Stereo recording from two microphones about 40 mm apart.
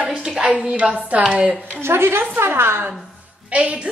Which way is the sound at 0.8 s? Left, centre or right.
Centre.